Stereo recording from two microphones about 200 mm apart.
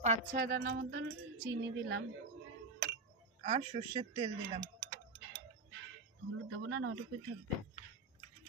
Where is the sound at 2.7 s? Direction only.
60° right (ahead or behind).